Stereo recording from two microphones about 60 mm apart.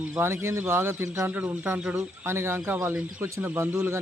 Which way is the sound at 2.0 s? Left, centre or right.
Right.